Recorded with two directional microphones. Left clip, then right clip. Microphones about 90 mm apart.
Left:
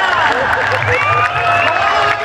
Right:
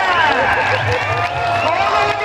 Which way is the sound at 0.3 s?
25° left (ahead or behind).